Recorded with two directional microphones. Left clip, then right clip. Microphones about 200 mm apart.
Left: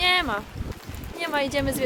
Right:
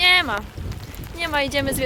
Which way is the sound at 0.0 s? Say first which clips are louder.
Right 5 dB; 10° left (ahead or behind).